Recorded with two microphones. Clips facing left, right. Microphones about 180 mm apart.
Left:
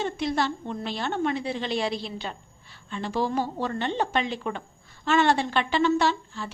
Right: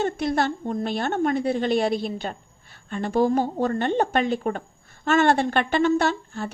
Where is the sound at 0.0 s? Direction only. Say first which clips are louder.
Right 3 dB; 50° right (ahead or behind).